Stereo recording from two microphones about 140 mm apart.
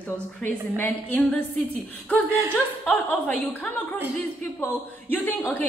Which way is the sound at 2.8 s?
10° left (ahead or behind).